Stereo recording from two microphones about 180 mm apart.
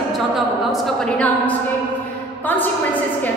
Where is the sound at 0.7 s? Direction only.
5° left (ahead or behind).